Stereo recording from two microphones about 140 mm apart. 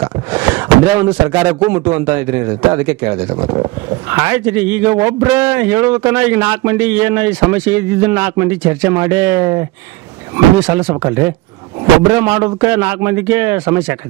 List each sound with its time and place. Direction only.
0.0 s a sound: 15° right (ahead or behind)
1.7 s a man's voice: 15° right (ahead or behind)
3.3 s speech: 40° right (ahead or behind)
4.1 s a man's voice: 20° right (ahead or behind)
12.1 s a man's voice: 20° right (ahead or behind)